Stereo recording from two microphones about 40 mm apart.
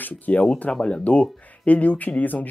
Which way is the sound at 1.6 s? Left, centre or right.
Left.